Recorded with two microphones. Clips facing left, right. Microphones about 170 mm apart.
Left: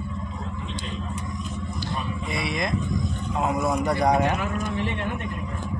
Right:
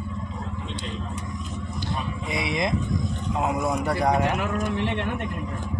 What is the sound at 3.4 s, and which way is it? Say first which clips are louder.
Speech: left 2 dB; 10° right (ahead or behind).